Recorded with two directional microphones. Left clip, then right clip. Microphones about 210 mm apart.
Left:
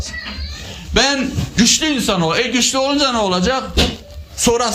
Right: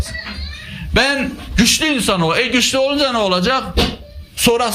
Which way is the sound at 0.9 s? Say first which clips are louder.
Even; 35° right (ahead or behind).